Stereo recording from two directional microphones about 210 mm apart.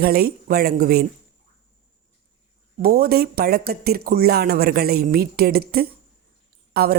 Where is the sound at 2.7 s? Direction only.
45° right (ahead or behind).